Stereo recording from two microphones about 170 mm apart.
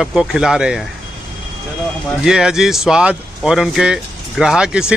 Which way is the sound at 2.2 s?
5° right (ahead or behind).